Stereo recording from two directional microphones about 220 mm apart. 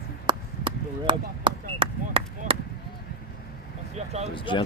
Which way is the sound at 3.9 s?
30° right (ahead or behind).